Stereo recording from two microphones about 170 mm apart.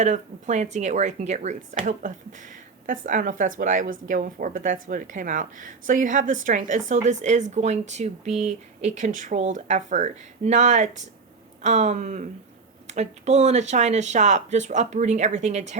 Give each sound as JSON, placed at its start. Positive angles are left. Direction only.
{"t": 0.0, "sound": "a woman's voice", "side_deg": -45}